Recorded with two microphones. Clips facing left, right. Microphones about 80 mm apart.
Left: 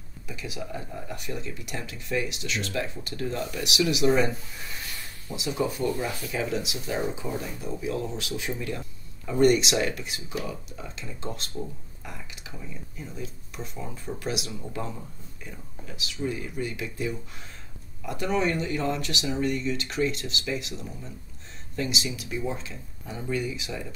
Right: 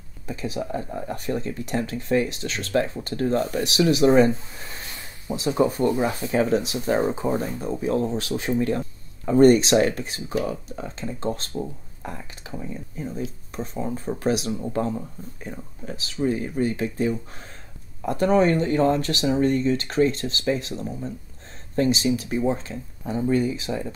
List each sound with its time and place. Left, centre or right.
0.3 s speech: right